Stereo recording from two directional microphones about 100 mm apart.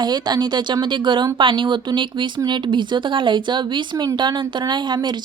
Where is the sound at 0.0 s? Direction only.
45° right (ahead or behind).